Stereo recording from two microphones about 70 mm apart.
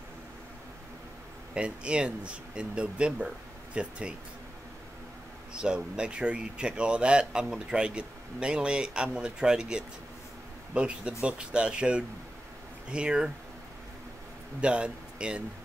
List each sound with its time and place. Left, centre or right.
1.5 s speech: centre
5.5 s speech: centre
14.6 s speech: centre